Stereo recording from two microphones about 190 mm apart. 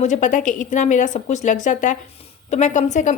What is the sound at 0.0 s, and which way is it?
A woman's voice, 40° left (ahead or behind).